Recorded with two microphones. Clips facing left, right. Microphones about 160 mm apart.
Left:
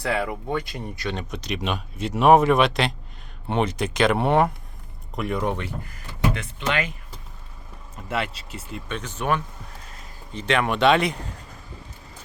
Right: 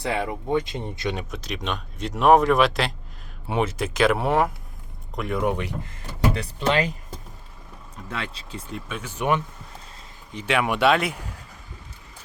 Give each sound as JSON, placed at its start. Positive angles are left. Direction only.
{"t": 0.0, "sound": "speech", "side_deg": -20}
{"t": 1.1, "sound": "speech", "side_deg": 0}
{"t": 6.3, "sound": "speech", "side_deg": -35}
{"t": 8.4, "sound": "speech", "side_deg": 5}
{"t": 8.9, "sound": "speech", "side_deg": -10}